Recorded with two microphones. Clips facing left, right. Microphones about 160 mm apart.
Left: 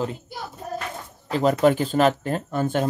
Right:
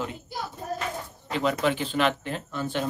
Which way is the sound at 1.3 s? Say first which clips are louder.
Left 7 dB; 45° left (ahead or behind).